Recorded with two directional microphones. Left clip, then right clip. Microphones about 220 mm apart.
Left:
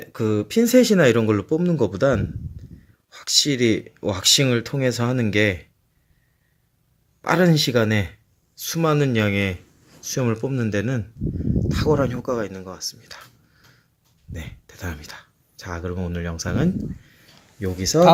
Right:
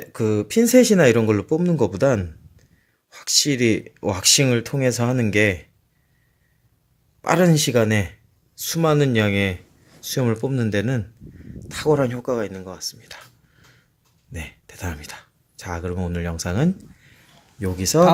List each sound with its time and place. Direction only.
0.0 s speech: 10° right (ahead or behind)
3.1 s a sound: 15° right (ahead or behind)
3.4 s speech: 15° right (ahead or behind)
7.2 s speech: 10° right (ahead or behind)
14.3 s speech: 15° right (ahead or behind)